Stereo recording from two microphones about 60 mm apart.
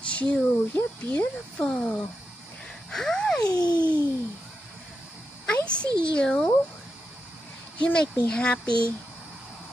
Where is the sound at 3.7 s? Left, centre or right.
Right.